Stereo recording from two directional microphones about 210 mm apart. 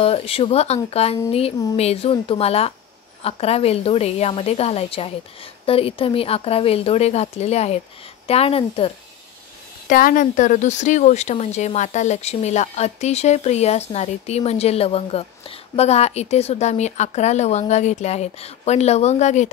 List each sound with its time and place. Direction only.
0.0 s a woman's voice: 25° left (ahead or behind)
9.8 s speech: 40° left (ahead or behind)